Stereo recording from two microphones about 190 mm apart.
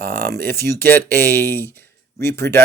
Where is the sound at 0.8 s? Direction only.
10° left (ahead or behind).